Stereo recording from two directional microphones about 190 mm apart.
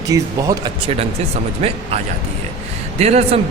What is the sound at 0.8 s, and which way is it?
Speech, 30° right (ahead or behind).